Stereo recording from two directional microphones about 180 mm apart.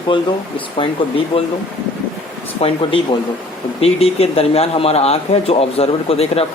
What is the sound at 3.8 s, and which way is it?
Speech, 35° left (ahead or behind).